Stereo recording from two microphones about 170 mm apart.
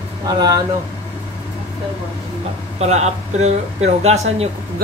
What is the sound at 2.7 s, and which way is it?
Speech, 40° right (ahead or behind).